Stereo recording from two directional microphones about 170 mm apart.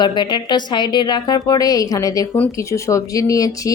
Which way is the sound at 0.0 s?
25° left (ahead or behind).